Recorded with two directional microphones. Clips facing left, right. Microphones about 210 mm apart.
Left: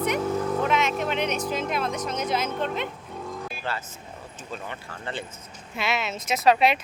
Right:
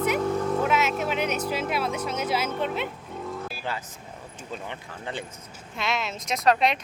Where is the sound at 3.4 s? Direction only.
10° right (ahead or behind).